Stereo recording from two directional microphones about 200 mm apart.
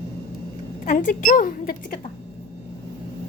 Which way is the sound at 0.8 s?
40° left (ahead or behind).